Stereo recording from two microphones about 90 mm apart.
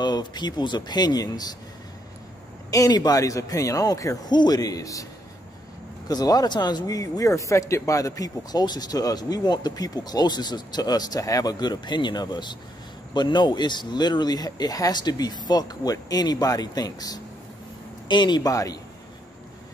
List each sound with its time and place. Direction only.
0.0 s speech: 50° left (ahead or behind)
2.7 s speech: 45° left (ahead or behind)
4.3 s speech: 50° left (ahead or behind)
6.0 s speech: 45° left (ahead or behind)
18.0 s speech: 55° left (ahead or behind)
18.5 s speech: 40° left (ahead or behind)